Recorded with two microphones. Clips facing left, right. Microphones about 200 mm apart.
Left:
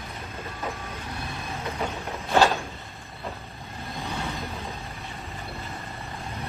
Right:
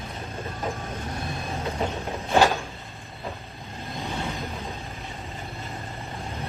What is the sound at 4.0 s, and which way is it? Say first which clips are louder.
Vehicle: right 1 dB; 15° right (ahead or behind).